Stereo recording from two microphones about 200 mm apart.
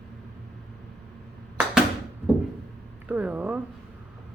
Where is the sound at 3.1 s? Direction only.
5° right (ahead or behind).